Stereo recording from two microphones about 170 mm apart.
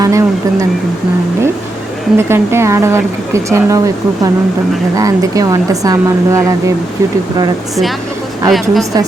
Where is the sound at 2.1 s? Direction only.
15° right (ahead or behind).